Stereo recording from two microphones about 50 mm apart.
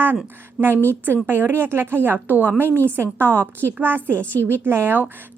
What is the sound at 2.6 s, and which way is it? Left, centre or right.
Speech, right.